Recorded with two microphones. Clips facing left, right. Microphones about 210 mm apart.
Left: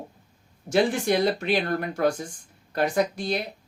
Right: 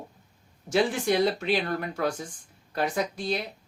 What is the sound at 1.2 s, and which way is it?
Speech, 50° left (ahead or behind).